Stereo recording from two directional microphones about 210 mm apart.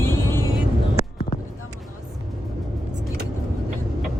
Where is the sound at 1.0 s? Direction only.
45° left (ahead or behind).